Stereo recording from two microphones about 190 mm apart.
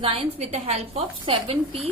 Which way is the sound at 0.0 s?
30° right (ahead or behind).